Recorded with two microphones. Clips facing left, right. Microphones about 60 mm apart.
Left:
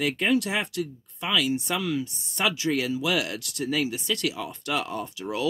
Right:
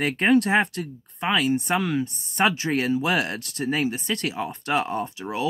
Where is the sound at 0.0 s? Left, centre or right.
Right.